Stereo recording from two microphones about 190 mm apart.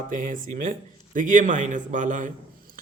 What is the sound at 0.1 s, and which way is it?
A man's voice, 45° right (ahead or behind).